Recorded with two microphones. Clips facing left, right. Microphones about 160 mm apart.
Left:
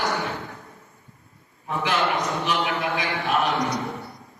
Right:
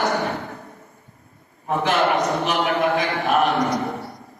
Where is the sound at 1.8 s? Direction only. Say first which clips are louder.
Right 4 dB; 50° right (ahead or behind).